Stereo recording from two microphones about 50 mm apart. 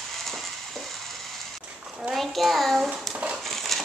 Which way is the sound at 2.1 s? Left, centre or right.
Centre.